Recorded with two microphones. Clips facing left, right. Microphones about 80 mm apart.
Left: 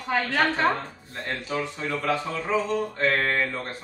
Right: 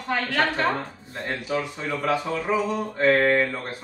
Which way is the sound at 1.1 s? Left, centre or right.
Centre.